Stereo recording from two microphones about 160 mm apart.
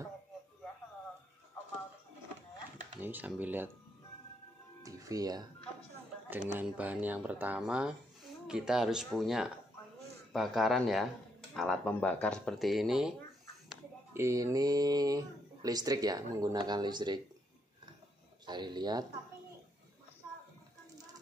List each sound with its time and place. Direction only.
3.0 s speech: 10° right (ahead or behind)
4.8 s music: 20° right (ahead or behind)
6.5 s speech: 10° right (ahead or behind)
14.1 s speech: 20° right (ahead or behind)
18.4 s speech: 25° right (ahead or behind)